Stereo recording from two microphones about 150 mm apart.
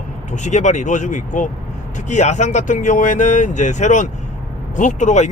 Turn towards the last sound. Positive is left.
turn(degrees=55)  # may be behind; listen again after turning